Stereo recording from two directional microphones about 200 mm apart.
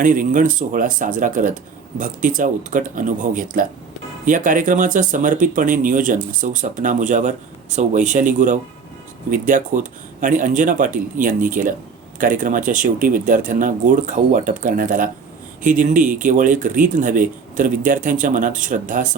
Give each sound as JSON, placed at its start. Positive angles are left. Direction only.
{"t": 0.0, "sound": "speech", "side_deg": -40}